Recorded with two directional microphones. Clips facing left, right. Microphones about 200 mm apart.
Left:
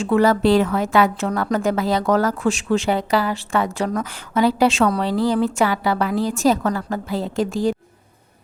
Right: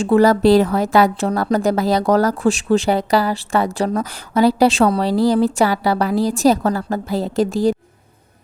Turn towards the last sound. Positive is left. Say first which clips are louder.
# right 4 dB
turn(degrees=-35)  # may be behind; listen again after turning